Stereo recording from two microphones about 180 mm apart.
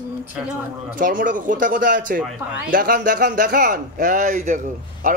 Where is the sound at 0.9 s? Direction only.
50° right (ahead or behind).